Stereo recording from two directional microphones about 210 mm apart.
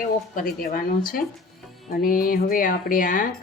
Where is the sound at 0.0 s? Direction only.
40° left (ahead or behind).